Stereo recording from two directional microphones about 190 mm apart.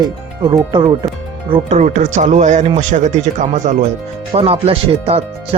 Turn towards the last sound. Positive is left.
turn(degrees=-30)  # may be behind; listen again after turning